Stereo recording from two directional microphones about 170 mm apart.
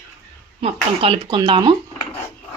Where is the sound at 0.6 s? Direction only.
35° right (ahead or behind).